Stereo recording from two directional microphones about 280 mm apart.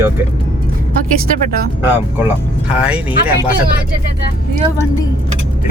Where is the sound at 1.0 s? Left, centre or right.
Right.